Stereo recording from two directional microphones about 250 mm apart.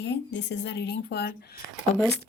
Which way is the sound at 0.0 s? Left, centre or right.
Left.